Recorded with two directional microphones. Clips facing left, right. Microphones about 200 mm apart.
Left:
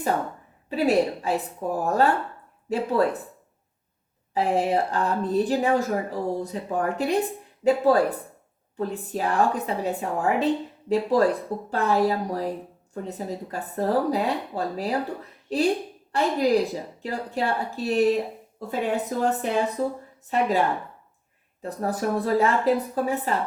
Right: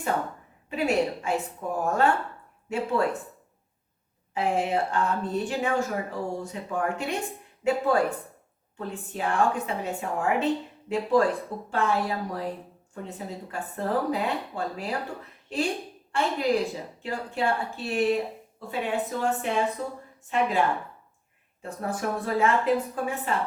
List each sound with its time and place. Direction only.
0.7 s speech: 35° left (ahead or behind)
4.4 s speech: 35° left (ahead or behind)